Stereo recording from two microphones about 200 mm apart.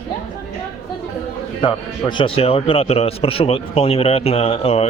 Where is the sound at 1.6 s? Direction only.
25° left (ahead or behind).